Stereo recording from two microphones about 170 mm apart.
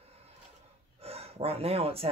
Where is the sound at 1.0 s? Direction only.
35° right (ahead or behind).